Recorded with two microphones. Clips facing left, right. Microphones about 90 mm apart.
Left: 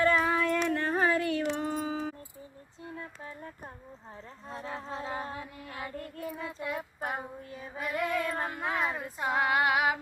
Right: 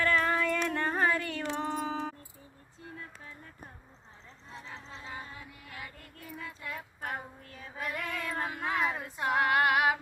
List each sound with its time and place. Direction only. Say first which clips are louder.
0.2 s a sound: left 2 dB; 5° left (ahead or behind)
1.8 s music: left 1 dB; 5° left (ahead or behind)
4.4 s music: left 8 dB; 50° left (ahead or behind)
5.6 s child singing: left 7 dB; 30° left (ahead or behind); by 7.7 s 15° left (ahead or behind)
7.7 s female singing: left 5 dB; 5° left (ahead or behind)